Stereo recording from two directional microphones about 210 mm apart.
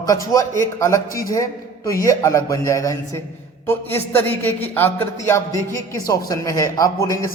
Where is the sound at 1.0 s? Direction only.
40° left (ahead or behind).